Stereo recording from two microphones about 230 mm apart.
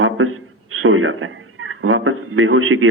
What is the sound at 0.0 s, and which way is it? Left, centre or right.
A man's voice, right.